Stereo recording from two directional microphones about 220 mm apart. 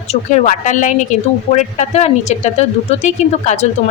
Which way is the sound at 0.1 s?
30° left (ahead or behind).